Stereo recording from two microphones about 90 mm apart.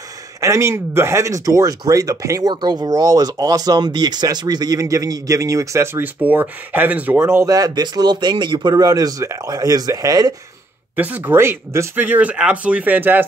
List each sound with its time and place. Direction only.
0.4 s speech: 35° right (ahead or behind)
2.5 s speech: 50° right (ahead or behind); by 6.0 s 30° right (ahead or behind)
6.2 s speech: 20° right (ahead or behind)
7.2 s speech: 30° right (ahead or behind)
7.5 s speech: 45° right (ahead or behind)
11.0 s speech: 20° right (ahead or behind)